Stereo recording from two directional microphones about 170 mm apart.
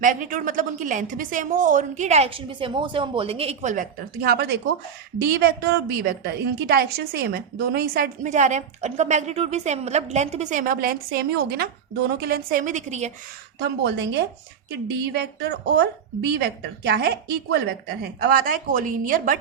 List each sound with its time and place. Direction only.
0.0 s a woman's voice: 50° right (ahead or behind)
4.2 s a woman's voice: 70° right (ahead or behind); by 13.1 s 45° right (ahead or behind)
13.6 s a woman's voice: 80° right; by 19.4 s 50° right (ahead or behind)